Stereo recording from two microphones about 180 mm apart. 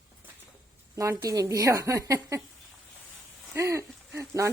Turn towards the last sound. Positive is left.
turn(degrees=-15)  # may be behind; listen again after turning